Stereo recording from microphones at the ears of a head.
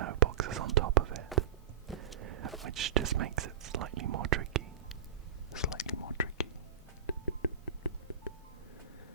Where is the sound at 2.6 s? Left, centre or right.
Right.